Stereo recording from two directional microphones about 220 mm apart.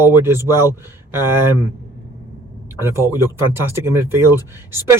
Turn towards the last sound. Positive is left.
turn(degrees=-10)  # may be behind; listen again after turning